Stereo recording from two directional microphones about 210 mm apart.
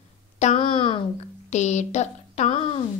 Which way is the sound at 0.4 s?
30° left (ahead or behind).